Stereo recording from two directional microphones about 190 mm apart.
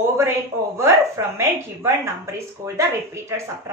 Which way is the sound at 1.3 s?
15° right (ahead or behind).